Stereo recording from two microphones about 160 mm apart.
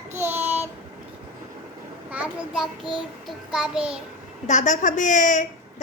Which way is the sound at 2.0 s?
10° right (ahead or behind).